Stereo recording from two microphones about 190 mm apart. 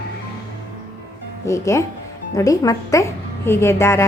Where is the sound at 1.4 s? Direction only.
15° left (ahead or behind).